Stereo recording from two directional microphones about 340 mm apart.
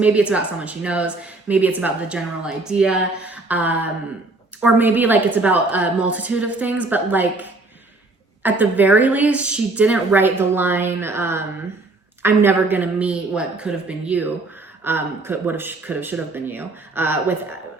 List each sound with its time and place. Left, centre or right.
0.0 s speech: centre